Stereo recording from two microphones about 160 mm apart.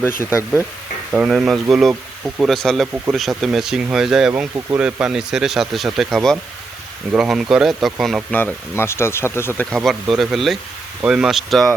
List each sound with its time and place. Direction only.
0.2 s speech: 15° left (ahead or behind)
1.1 s speech: 5° right (ahead or behind)
8.3 s speech: 10° left (ahead or behind)
9.7 s speech: centre (ahead or behind)